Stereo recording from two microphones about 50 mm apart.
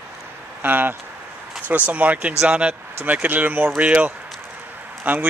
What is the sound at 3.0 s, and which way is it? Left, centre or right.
Speech, right.